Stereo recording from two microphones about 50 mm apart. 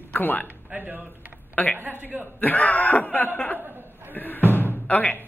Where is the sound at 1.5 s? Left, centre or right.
Left.